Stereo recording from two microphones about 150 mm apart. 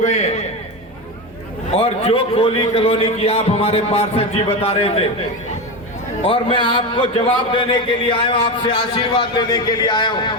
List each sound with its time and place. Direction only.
0.0 s a sound: 50° left (ahead or behind)
1.8 s a man's voice: 40° left (ahead or behind)
6.2 s a man's voice: 35° left (ahead or behind)